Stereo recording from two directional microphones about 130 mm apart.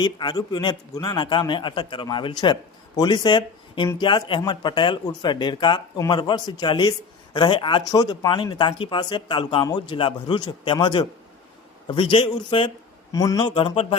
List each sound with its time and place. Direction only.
0.0 s a man's voice: 35° left (ahead or behind)
13.1 s a man's voice: 30° left (ahead or behind)